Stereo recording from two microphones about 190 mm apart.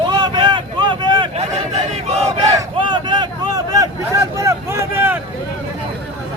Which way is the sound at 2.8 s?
25° right (ahead or behind).